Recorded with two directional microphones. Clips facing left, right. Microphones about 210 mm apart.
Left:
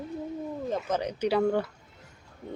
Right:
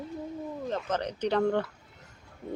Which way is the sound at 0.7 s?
10° left (ahead or behind).